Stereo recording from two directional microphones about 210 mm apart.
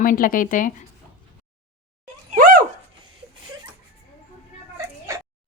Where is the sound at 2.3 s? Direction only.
40° right (ahead or behind).